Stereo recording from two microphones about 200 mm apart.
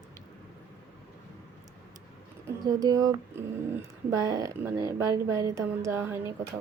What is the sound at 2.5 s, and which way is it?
Speech, 20° right (ahead or behind).